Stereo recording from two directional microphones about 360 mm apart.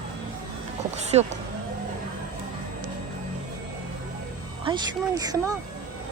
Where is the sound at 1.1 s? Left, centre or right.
Centre.